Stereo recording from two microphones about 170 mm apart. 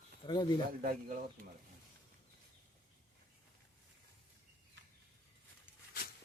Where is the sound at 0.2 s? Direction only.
25° left (ahead or behind).